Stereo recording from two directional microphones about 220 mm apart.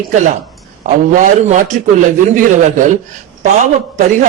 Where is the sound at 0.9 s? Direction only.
35° right (ahead or behind).